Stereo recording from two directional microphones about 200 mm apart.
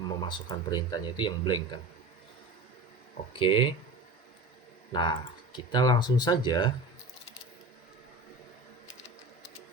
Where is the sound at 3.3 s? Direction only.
25° left (ahead or behind).